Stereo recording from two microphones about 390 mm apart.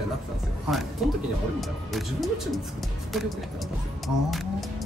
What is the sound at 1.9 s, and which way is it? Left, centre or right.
Speech, centre.